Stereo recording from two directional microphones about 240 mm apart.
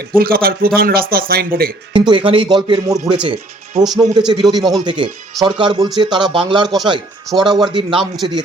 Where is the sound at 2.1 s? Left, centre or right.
Right.